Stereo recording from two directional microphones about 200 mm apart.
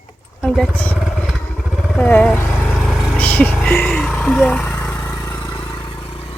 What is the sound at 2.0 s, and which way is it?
Speech, 10° left (ahead or behind).